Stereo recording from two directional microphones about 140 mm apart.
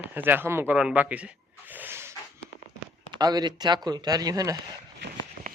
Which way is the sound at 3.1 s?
30° right (ahead or behind).